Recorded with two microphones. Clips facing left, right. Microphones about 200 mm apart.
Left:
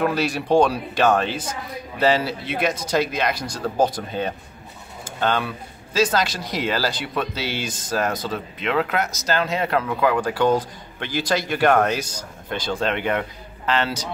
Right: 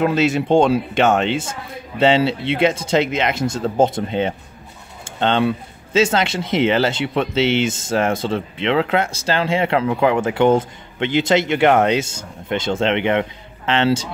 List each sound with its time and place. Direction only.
0.0 s speech: 20° right (ahead or behind)
5.0 s pigeon: 25° right (ahead or behind)
5.9 s speech: 25° right (ahead or behind)